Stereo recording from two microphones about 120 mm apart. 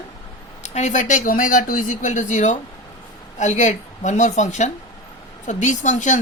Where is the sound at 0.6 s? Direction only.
75° left (ahead or behind).